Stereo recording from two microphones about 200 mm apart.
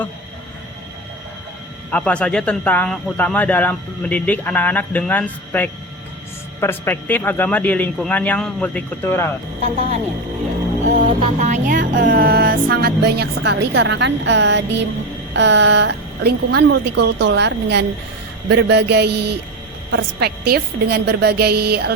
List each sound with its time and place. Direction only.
1.9 s speech: 5° left (ahead or behind)
10.9 s music: 35° right (ahead or behind)
11.9 s a woman's voice: 45° right (ahead or behind)